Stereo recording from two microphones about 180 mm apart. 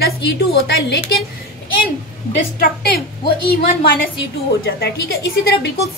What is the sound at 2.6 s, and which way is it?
Speech, 60° left (ahead or behind).